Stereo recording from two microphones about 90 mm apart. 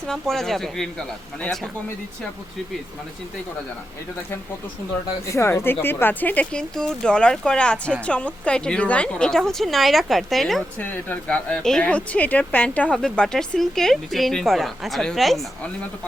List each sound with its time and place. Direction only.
0.1 s a woman's voice: 5° left (ahead or behind)
5.2 s a woman's voice: 30° left (ahead or behind); by 10.6 s centre (ahead or behind)
10.8 s speech: 20° left (ahead or behind)
11.3 s speech: 10° left (ahead or behind)
13.0 s a woman's voice: 5° left (ahead or behind)